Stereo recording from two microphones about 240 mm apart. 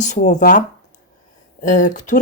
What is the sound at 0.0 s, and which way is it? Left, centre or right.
Speech, left.